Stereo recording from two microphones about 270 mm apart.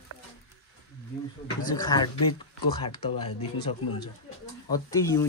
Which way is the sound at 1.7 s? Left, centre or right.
Centre.